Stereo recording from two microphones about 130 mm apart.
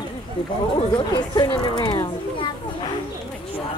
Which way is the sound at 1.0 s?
35° left (ahead or behind).